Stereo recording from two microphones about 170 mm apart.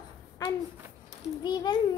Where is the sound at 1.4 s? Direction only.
25° left (ahead or behind).